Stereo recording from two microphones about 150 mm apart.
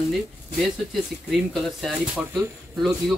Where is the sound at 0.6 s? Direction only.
Centre (ahead or behind).